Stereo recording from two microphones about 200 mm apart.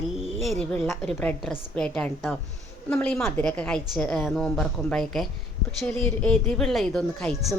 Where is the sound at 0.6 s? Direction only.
5° left (ahead or behind).